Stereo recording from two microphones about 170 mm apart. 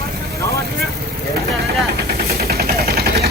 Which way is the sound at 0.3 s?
15° left (ahead or behind).